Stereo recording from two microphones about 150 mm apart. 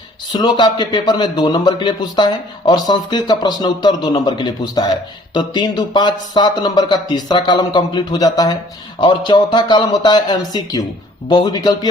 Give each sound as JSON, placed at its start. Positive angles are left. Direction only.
{"t": 0.3, "sound": "speech", "side_deg": 30}